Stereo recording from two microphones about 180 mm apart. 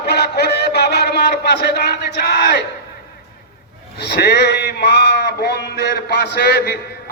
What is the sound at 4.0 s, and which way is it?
A man's voice, 60° left (ahead or behind).